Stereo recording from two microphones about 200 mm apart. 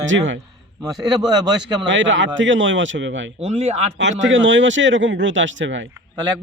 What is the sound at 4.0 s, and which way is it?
Speech, 65° right (ahead or behind).